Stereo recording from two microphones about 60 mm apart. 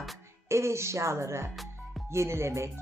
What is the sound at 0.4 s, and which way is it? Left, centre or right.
Speech, right.